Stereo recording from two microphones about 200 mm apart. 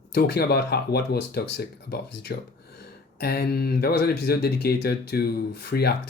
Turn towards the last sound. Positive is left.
turn(degrees=55)  # may be behind; listen again after turning